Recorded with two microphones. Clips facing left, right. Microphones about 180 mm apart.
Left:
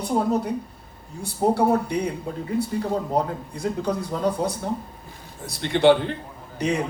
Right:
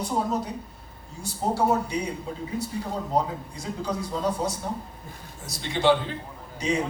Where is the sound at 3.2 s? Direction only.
60° left (ahead or behind).